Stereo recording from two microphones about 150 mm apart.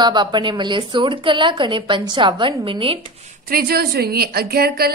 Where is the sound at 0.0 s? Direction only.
30° right (ahead or behind).